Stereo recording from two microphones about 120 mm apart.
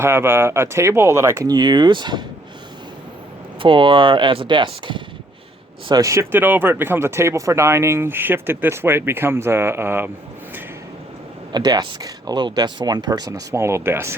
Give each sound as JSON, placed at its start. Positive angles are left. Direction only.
{"t": 0.0, "sound": "speech", "side_deg": -20}
{"t": 3.6, "sound": "speech", "side_deg": -45}
{"t": 5.9, "sound": "speech", "side_deg": -25}
{"t": 11.5, "sound": "speech", "side_deg": -35}